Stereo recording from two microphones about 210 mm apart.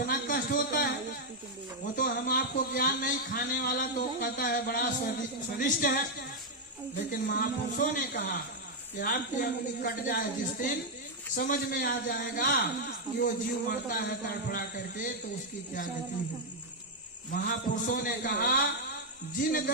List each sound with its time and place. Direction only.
0.0 s a sound: 45° left (ahead or behind)
2.0 s a man's voice: 45° left (ahead or behind)
7.1 s a man's voice: 45° left (ahead or behind)
17.3 s a man's voice: 40° left (ahead or behind)